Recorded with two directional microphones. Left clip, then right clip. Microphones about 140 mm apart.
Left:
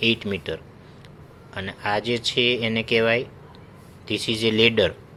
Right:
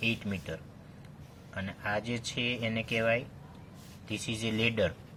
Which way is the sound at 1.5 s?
40° left (ahead or behind).